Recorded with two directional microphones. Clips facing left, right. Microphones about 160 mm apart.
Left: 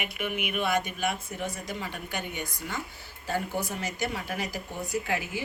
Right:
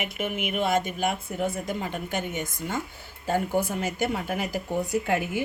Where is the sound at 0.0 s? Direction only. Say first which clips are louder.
Right 3 dB; 45° right (ahead or behind).